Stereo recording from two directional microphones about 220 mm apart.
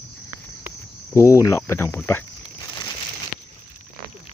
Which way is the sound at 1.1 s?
15° left (ahead or behind).